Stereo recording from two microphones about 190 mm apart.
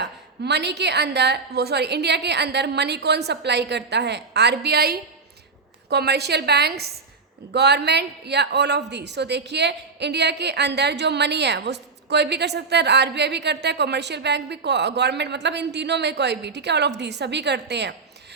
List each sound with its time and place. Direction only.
0.0 s a woman's voice: 65° right (ahead or behind)